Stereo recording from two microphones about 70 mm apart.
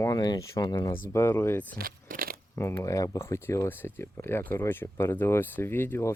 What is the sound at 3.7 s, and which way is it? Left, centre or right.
Speech, left.